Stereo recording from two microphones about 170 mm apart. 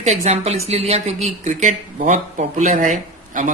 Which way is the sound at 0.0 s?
40° right (ahead or behind).